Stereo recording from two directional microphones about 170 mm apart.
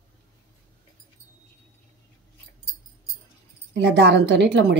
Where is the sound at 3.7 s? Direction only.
85° right.